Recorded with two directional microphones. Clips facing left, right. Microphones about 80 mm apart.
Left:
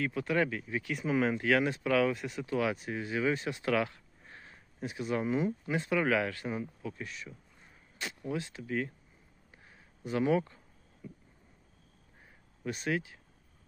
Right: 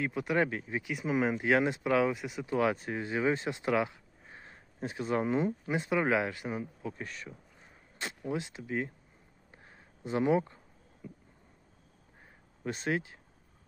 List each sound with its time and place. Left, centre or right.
0.0 s speech: right
0.8 s speech: centre
2.1 s speech: centre
2.5 s speech: right
3.9 s a sound: centre
4.4 s speech: right
5.7 s speech: right
6.8 s speech: right
8.3 s speech: right
9.5 s a sound: right
10.0 s speech: right
11.0 s a sound: right
12.6 s speech: right